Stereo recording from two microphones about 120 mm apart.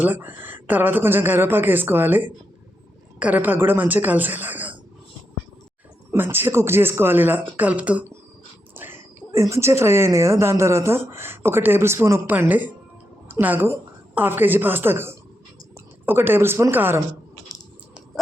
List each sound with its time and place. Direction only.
0.0 s a woman's voice: 15° right (ahead or behind)
6.1 s a woman's voice: 20° right (ahead or behind)
17.5 s a sound: 30° left (ahead or behind)